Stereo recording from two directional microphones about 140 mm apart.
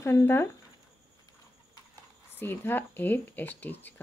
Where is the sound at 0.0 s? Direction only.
20° left (ahead or behind).